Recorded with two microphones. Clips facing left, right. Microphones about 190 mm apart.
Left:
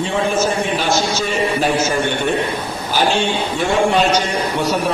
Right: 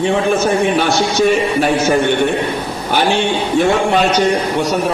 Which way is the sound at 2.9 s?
60° right (ahead or behind).